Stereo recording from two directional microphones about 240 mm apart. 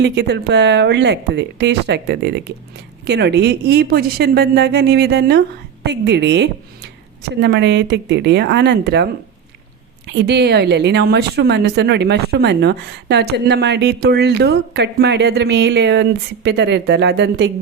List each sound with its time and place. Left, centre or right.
0.0 s speech: right
10.1 s speech: right